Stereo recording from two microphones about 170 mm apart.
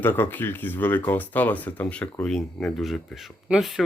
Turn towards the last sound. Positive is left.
turn(degrees=0)  # may be behind; listen again after turning